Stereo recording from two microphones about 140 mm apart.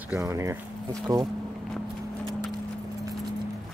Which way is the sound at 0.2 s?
20° right (ahead or behind).